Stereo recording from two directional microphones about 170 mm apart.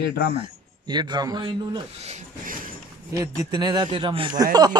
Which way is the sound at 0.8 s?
25° right (ahead or behind).